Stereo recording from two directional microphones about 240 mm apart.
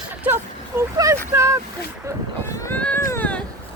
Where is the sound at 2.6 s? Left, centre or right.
Centre.